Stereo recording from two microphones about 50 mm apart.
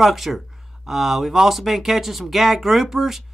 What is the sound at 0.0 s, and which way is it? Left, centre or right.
Speech, centre.